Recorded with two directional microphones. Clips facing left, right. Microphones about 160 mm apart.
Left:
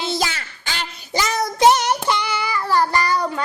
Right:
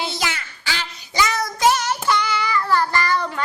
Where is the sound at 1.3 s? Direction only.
25° left (ahead or behind).